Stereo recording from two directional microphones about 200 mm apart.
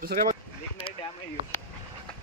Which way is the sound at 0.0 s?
45° right (ahead or behind).